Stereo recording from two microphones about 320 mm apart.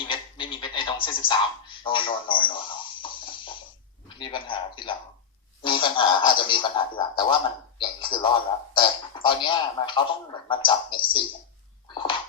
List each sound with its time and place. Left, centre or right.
0.0 s radio: centre
1.0 s speech: centre
3.0 s music: centre
4.2 s speech: centre